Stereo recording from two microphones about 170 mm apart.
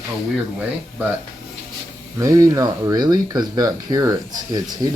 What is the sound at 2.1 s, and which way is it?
Speech, 20° right (ahead or behind).